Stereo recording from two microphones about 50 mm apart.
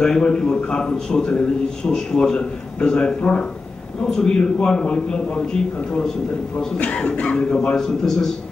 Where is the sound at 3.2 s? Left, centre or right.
Left.